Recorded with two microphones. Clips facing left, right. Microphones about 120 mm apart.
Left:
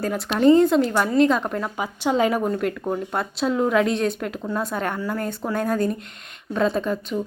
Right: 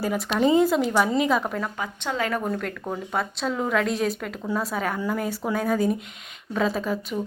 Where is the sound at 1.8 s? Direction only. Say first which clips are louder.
Left 10 dB; 20° left (ahead or behind).